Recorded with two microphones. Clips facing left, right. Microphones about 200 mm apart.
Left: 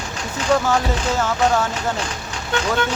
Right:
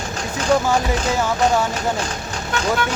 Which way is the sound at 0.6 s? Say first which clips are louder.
Right 1 dB; 15° right (ahead or behind).